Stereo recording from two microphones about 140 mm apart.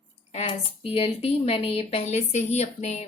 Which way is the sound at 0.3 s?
45° left (ahead or behind).